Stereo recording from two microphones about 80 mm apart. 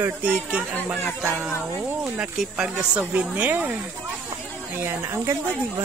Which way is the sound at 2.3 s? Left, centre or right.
Centre.